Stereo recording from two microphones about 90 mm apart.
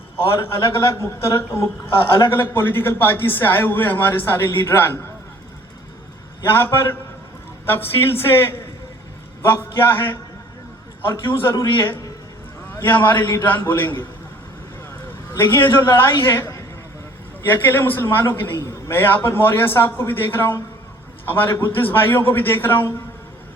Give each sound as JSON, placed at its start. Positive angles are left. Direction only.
{"t": 0.3, "sound": "a man's voice", "side_deg": 30}
{"t": 6.4, "sound": "a man's voice", "side_deg": 25}
{"t": 12.7, "sound": "a man's voice", "side_deg": 25}
{"t": 15.3, "sound": "a man's voice", "side_deg": 25}